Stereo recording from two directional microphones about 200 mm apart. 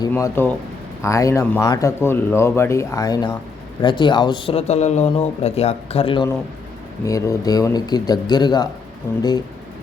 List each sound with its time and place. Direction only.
0.1 s speech: 10° left (ahead or behind); by 6.2 s 25° left (ahead or behind)
7.0 s speech: 15° left (ahead or behind)